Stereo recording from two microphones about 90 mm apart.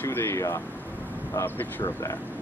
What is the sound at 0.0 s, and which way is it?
Speech, 25° left (ahead or behind).